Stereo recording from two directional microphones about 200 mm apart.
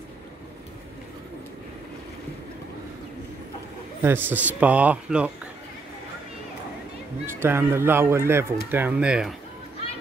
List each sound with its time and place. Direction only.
4.0 s speech: 10° right (ahead or behind)
7.3 s speech: 10° right (ahead or behind)